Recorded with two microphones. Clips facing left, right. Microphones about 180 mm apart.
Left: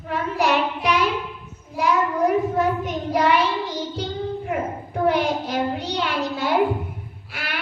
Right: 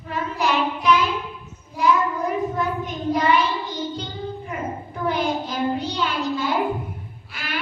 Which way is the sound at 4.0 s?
65° left (ahead or behind).